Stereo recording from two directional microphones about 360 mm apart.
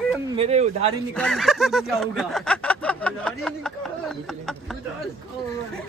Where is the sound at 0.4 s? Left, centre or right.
Centre.